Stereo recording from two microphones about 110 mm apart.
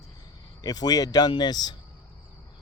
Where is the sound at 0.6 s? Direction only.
35° left (ahead or behind).